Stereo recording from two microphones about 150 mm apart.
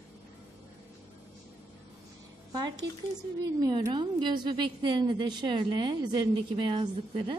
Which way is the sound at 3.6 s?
30° right (ahead or behind).